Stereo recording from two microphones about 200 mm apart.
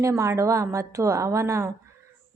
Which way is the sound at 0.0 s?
15° right (ahead or behind).